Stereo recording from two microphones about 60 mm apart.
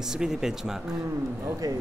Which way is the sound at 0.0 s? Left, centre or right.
Centre.